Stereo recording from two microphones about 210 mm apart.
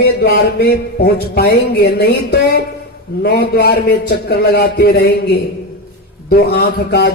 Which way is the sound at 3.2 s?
50° left (ahead or behind).